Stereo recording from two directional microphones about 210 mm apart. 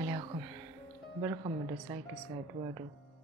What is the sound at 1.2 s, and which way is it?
Speech, 15° right (ahead or behind).